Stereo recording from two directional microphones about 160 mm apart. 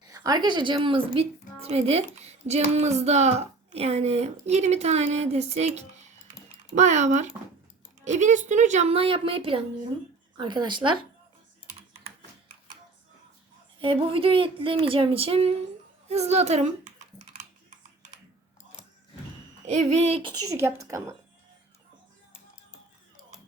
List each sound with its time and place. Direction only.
0.0 s a woman's voice: 25° right (ahead or behind)
13.7 s speech: 35° right (ahead or behind)
17.3 s typing: 50° right (ahead or behind)
19.9 s speech: 40° right (ahead or behind)
20.5 s a woman's voice: 15° right (ahead or behind)